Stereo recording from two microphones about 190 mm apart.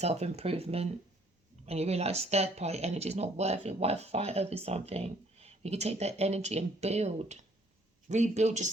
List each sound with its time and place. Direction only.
0.0 s speech: 35° right (ahead or behind)